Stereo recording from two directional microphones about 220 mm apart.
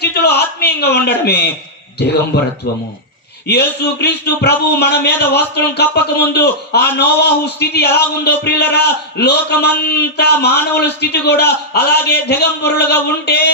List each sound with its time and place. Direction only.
0.0 s a sound: 45° left (ahead or behind)
2.0 s a man's voice: 50° left (ahead or behind)
3.5 s a man's voice: 45° left (ahead or behind)